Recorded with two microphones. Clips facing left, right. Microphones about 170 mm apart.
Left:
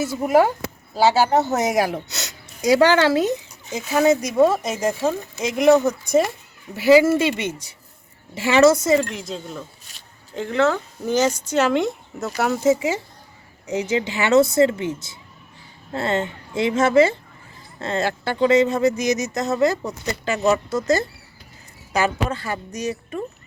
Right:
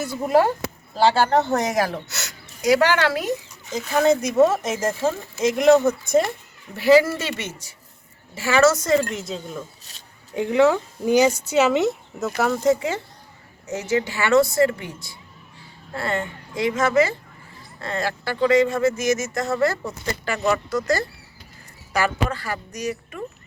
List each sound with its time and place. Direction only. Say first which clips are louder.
0.0 s speech: left 2 dB; 10° left (ahead or behind); by 3.3 s 25° left (ahead or behind)
3.7 s speech: left 1 dB; 5° left (ahead or behind); by 8.8 s 25° left (ahead or behind)
9.0 s speech: even; centre (ahead or behind)
10.3 s speech: right 3 dB; 10° right (ahead or behind)
12.4 s speech: left 1 dB; 5° left (ahead or behind); by 23.2 s 25° left (ahead or behind)